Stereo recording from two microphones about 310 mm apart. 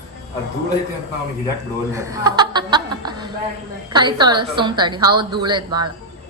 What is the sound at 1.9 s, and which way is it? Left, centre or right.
Chuckle, centre.